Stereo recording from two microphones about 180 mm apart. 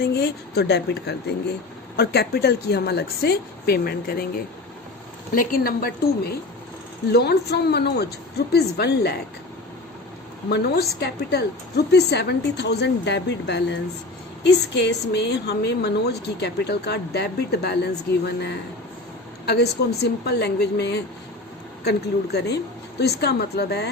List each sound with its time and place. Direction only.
0.0 s a woman's voice: 65° left (ahead or behind)
5.3 s a woman's voice: 55° left (ahead or behind)
7.1 s a woman's voice: 65° left (ahead or behind)
10.5 s a woman's voice: 65° left (ahead or behind)